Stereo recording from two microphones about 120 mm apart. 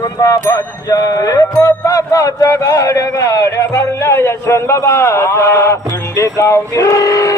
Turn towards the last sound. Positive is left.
turn(degrees=25)  # may be behind; listen again after turning